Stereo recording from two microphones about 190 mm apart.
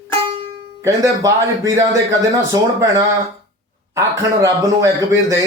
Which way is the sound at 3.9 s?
15° right (ahead or behind).